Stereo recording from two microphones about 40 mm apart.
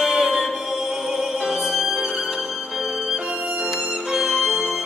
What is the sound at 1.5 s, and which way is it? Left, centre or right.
Music, centre.